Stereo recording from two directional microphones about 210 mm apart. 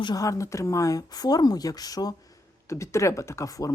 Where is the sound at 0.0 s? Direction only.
15° left (ahead or behind).